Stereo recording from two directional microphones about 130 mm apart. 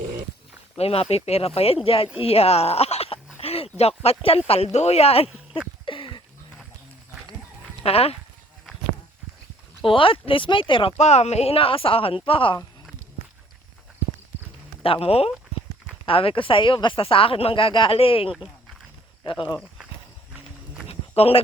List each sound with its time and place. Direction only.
0.8 s speech: 50° left (ahead or behind)
5.8 s a sound: 40° left (ahead or behind)
7.8 s speech: 50° left (ahead or behind)
9.8 s speech: 45° left (ahead or behind)
10.9 s speech: 60° left (ahead or behind); by 12.5 s 45° left (ahead or behind)
14.8 s speech: 45° left (ahead or behind)
20.8 s a sound: 45° left (ahead or behind)